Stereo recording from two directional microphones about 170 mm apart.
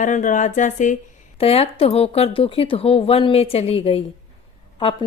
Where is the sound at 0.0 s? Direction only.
45° left (ahead or behind).